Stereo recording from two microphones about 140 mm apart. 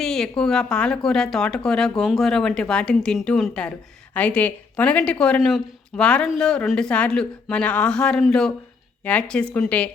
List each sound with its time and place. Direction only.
0.0 s speech: 5° left (ahead or behind)